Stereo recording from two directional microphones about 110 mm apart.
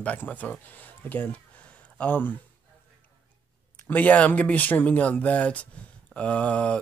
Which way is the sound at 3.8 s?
15° left (ahead or behind).